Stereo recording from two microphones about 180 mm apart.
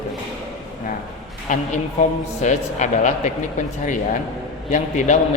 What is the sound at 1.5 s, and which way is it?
A man's voice, 45° left (ahead or behind).